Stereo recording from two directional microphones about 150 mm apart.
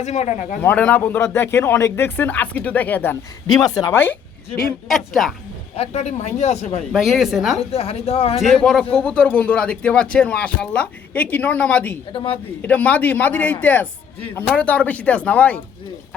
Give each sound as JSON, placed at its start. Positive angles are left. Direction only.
{"t": 0.0, "sound": "speech", "side_deg": 50}
{"t": 0.6, "sound": "speech", "side_deg": 10}
{"t": 4.9, "sound": "a woman's voice", "side_deg": 0}
{"t": 5.7, "sound": "speech", "side_deg": 45}
{"t": 6.9, "sound": "a woman's voice", "side_deg": 0}
{"t": 7.6, "sound": "speech", "side_deg": 40}
{"t": 8.4, "sound": "a woman's voice", "side_deg": 0}
{"t": 12.1, "sound": "a man's voice", "side_deg": 40}
{"t": 12.6, "sound": "speech", "side_deg": 10}